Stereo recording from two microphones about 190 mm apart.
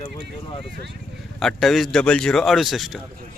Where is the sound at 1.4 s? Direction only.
Centre (ahead or behind).